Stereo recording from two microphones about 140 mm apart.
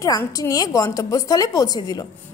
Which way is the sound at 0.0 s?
25° left (ahead or behind).